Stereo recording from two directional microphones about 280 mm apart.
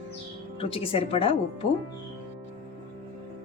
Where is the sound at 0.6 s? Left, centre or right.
Centre.